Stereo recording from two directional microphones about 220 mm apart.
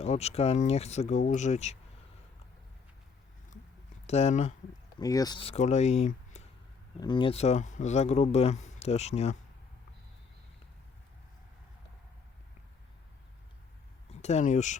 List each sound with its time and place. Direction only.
0.0 s speech: 30° left (ahead or behind)
4.0 s speech: 30° left (ahead or behind)
4.9 s speech: 15° left (ahead or behind)
14.1 s speech: 30° left (ahead or behind)